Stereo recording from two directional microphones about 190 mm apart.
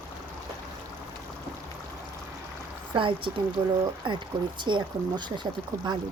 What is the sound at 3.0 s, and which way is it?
Speech, 25° right (ahead or behind).